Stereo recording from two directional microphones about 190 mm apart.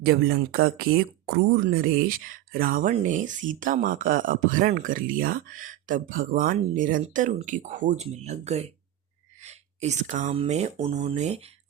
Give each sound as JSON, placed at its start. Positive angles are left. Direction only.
{"t": 0.0, "sound": "speech", "side_deg": -55}